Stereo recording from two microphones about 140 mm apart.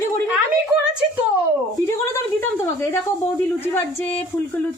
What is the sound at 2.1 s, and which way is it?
Speech, 20° left (ahead or behind).